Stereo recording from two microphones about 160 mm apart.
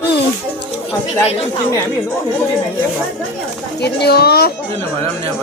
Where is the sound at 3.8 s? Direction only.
90° left.